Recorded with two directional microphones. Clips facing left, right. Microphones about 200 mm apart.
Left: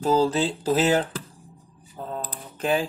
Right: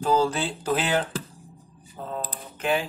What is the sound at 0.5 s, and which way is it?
Speech, 25° left (ahead or behind).